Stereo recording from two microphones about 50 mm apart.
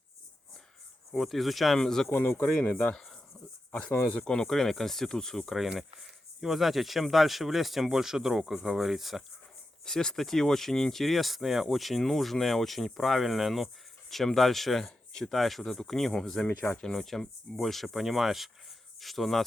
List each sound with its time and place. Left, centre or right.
1.1 s speech: centre
1.8 s speech: centre
2.1 s speech: left
2.4 s speech: left
2.9 s speech: centre
4.3 s speech: centre
5.6 s speech: centre
9.8 s speech: centre